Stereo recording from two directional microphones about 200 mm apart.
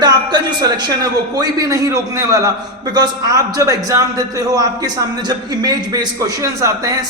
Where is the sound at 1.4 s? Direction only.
15° right (ahead or behind).